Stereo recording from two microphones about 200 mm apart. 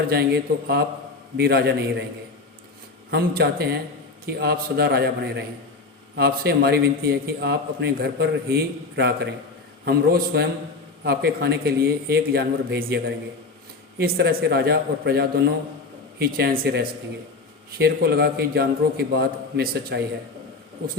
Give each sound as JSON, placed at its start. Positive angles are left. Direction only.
{"t": 0.1, "sound": "a man's voice", "side_deg": -55}
{"t": 3.1, "sound": "a man's voice", "side_deg": -50}
{"t": 14.0, "sound": "a man's voice", "side_deg": -50}